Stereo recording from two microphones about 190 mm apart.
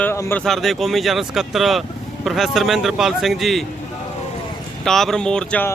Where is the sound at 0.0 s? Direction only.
10° left (ahead or behind).